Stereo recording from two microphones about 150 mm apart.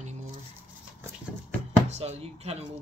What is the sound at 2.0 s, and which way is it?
Speech, 45° right (ahead or behind).